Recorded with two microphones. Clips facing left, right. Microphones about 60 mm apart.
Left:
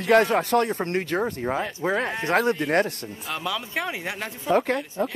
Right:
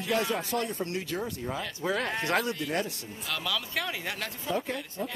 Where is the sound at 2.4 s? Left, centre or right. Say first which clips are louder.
Left 9 dB; left.